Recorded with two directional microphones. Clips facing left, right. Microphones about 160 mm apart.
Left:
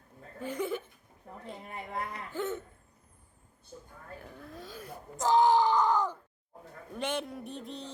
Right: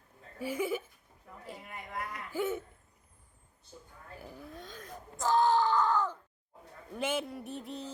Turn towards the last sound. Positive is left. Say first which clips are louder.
# even
turn(degrees=-5)  # may be behind; listen again after turning